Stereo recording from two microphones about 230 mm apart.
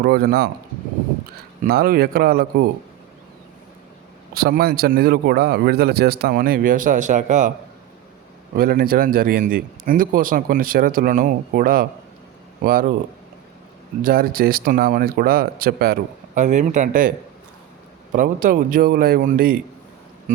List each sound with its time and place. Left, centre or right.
0.0 s speech: right
1.6 s a man's voice: right
4.4 s a man's voice: right
8.5 s a man's voice: right
14.0 s a man's voice: right
18.1 s a man's voice: right